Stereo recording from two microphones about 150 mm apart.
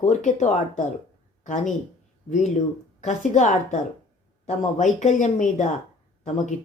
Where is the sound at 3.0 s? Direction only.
50° left (ahead or behind).